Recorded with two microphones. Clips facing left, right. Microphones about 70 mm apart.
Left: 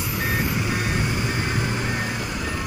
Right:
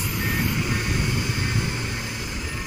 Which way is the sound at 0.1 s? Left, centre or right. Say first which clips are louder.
Left 2 dB; centre.